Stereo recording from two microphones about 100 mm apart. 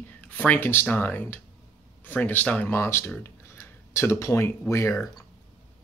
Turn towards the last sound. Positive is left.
turn(degrees=25)  # may be behind; listen again after turning